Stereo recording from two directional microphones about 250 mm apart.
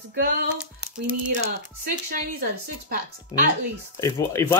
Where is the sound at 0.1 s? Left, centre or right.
Right.